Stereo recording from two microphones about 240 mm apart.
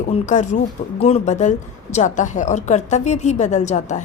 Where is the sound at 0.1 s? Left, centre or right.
Left.